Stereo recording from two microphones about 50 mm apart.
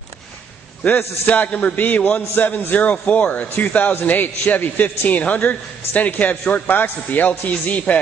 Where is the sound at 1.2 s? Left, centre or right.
Left.